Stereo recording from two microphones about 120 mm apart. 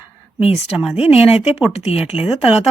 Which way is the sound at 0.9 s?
55° left (ahead or behind).